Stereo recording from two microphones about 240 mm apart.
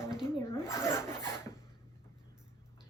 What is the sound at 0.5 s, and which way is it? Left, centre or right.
Rub, centre.